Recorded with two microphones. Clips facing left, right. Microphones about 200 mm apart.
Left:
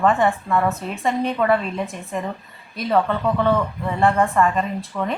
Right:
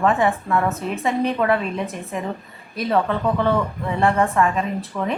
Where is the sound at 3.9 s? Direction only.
Centre (ahead or behind).